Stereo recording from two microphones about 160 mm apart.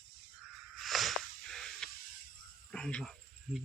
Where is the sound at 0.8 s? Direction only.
Centre (ahead or behind).